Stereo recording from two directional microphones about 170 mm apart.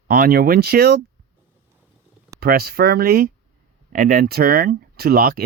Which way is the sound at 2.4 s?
65° right (ahead or behind).